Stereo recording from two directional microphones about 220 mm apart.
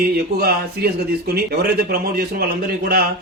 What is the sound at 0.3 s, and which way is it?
Speech, 45° right (ahead or behind).